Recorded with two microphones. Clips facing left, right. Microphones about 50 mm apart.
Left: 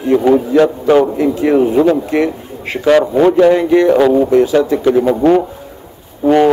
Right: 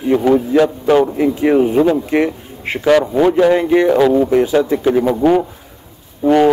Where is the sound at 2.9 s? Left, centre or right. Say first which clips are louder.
Left 2 dB; centre.